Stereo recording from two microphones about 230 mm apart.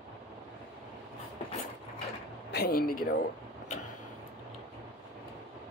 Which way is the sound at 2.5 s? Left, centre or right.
Left.